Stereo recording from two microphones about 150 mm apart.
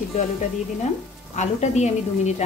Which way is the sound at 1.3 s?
50° left (ahead or behind).